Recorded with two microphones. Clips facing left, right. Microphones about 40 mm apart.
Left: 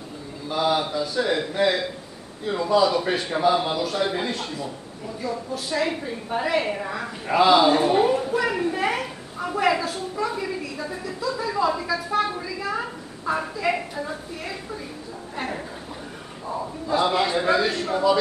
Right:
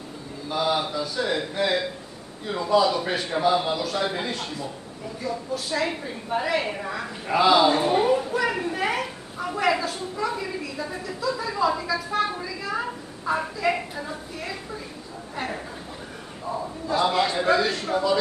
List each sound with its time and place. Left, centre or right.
0.5 s a man's voice: centre
15.3 s a sound: centre
16.4 s a man's voice: centre